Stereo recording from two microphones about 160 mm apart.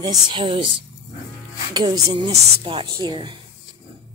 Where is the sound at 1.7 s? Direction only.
25° right (ahead or behind).